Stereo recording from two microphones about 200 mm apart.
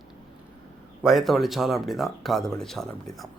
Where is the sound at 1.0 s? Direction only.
Centre (ahead or behind).